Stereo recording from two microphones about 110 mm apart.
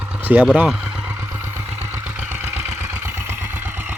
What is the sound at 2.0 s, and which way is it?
Vehicle, 15° right (ahead or behind).